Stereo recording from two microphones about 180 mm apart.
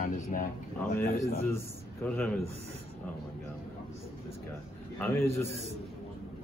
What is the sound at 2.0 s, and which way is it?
Speech, 10° left (ahead or behind).